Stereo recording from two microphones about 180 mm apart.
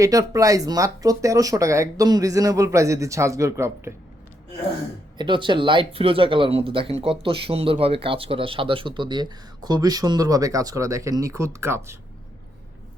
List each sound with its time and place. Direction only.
0.0 s speech: 20° right (ahead or behind)
5.1 s speech: 25° right (ahead or behind)